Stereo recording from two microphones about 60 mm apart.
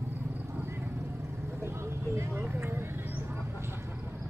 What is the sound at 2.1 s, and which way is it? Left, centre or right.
Vehicle, right.